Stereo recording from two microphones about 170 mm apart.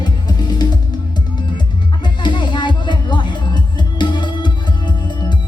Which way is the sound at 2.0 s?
25° left (ahead or behind).